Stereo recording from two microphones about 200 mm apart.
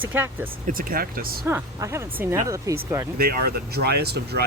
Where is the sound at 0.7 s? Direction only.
45° right (ahead or behind).